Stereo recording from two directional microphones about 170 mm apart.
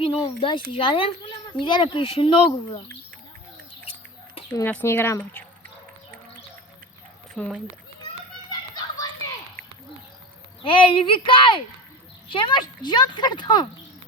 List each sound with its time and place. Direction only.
0.0 s speech: 30° left (ahead or behind)
4.5 s speech: 10° left (ahead or behind)
8.4 s children playing: 20° left (ahead or behind)
9.6 s a sound: 60° right (ahead or behind)
10.6 s a child's voice: 30° left (ahead or behind)